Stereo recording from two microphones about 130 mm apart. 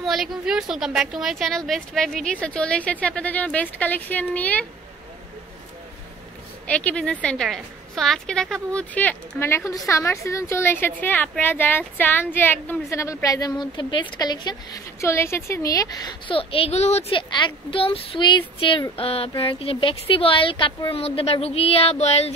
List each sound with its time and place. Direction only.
0.0 s a woman's voice: centre (ahead or behind)
6.7 s a woman's voice: 10° left (ahead or behind); by 15.0 s 35° left (ahead or behind)
15.0 s a woman's voice: 20° left (ahead or behind)
16.3 s speech: 45° left (ahead or behind)
17.1 s speech: 40° left (ahead or behind); by 22.3 s 55° left (ahead or behind)